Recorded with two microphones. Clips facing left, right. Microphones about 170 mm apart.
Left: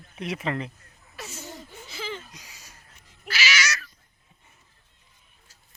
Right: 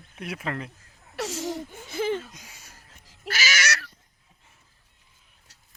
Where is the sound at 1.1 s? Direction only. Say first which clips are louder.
Right 10 dB; 85° right.